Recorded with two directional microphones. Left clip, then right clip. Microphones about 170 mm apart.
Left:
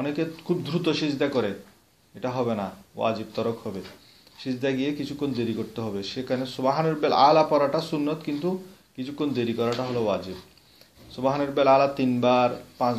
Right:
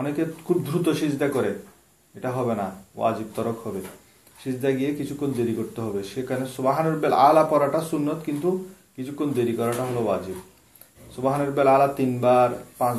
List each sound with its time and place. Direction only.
0.0 s speech: 45° left (ahead or behind)